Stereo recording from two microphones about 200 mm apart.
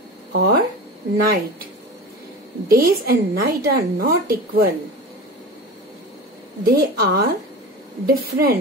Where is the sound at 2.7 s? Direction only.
50° right (ahead or behind).